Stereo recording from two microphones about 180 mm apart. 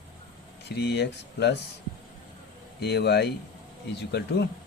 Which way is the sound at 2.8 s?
65° left (ahead or behind).